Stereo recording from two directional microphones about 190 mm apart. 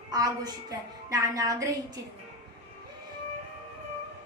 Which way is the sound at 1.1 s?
15° right (ahead or behind).